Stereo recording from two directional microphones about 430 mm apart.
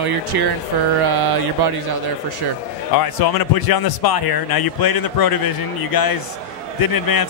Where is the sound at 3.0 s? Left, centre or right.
Left.